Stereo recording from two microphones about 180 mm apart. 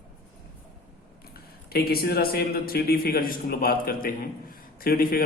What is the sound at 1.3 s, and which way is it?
A man's voice, 55° left (ahead or behind).